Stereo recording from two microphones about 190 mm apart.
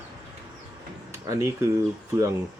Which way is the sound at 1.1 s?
15° right (ahead or behind).